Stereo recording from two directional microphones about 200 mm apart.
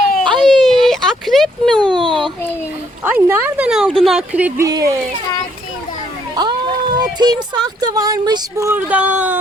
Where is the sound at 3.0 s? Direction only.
10° right (ahead or behind).